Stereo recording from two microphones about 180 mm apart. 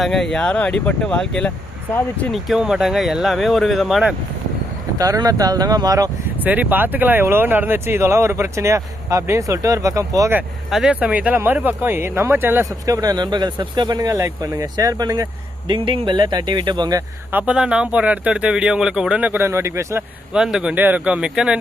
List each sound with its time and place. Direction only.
0.0 s speech: centre (ahead or behind)
4.9 s speech: 20° right (ahead or behind)
6.4 s speech: 10° right (ahead or behind)
10.7 s speech: 5° right (ahead or behind); by 17.0 s 25° right (ahead or behind)
17.3 s speech: 5° right (ahead or behind)